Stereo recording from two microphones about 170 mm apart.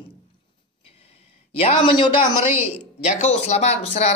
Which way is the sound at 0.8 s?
35° left (ahead or behind).